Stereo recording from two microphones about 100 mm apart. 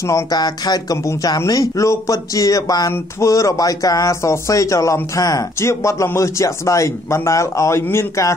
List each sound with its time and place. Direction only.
0.0 s speech: 40° left (ahead or behind)